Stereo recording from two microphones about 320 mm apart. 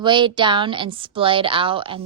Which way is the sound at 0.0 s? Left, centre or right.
Centre.